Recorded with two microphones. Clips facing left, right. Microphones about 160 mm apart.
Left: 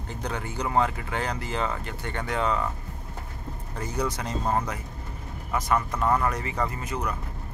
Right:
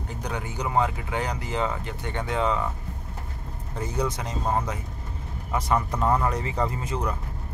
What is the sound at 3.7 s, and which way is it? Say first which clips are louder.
Speech: right 1 dB; 20° right (ahead or behind).